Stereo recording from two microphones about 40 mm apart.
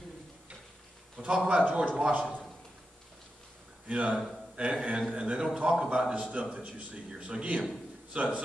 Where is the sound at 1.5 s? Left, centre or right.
Right.